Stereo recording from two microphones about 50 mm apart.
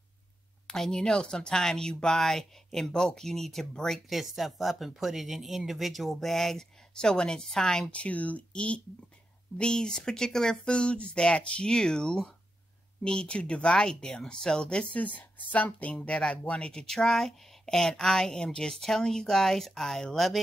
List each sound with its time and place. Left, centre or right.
0.7 s speech: centre
7.9 s speech: left
15.0 s speech: left; by 20.3 s centre